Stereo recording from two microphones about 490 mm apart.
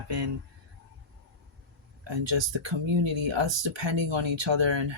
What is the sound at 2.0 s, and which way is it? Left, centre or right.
Speech, right.